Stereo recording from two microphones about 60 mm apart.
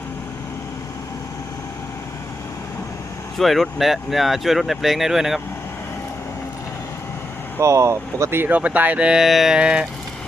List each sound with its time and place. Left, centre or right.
3.3 s speech: centre
7.6 s speech: right
8.4 s speech: right
9.2 s speech: centre
9.6 s vehicle: centre